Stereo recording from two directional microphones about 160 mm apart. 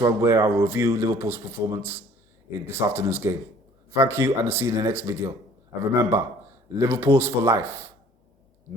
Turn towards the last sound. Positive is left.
turn(degrees=-15)  # may be behind; listen again after turning